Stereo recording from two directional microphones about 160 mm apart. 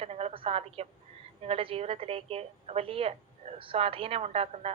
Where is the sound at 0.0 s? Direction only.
40° right (ahead or behind).